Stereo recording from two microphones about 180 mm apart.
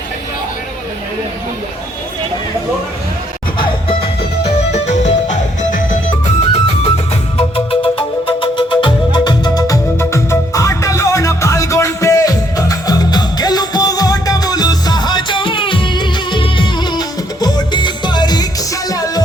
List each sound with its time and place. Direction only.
4.4 s music: 40° left (ahead or behind)
6.1 s music: 30° left (ahead or behind)